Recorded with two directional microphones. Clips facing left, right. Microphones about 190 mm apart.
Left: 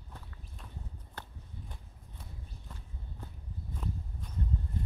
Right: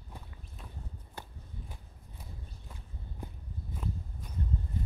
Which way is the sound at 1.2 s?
10° right (ahead or behind).